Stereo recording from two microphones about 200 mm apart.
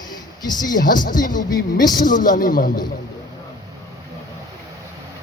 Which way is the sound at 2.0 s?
40° left (ahead or behind).